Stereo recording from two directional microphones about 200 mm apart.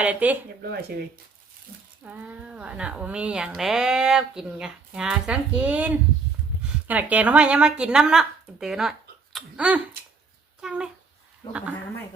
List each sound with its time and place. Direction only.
0.0 s speech: 5° right (ahead or behind)
0.6 s speech: 55° right (ahead or behind)
2.0 s speech: 10° right (ahead or behind)